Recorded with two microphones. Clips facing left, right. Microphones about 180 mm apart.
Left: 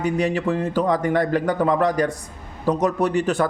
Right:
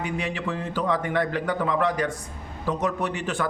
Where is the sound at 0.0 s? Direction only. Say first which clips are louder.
Left 8 dB; 40° left (ahead or behind).